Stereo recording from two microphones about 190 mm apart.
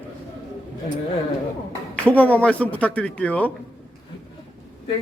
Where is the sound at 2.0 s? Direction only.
10° left (ahead or behind).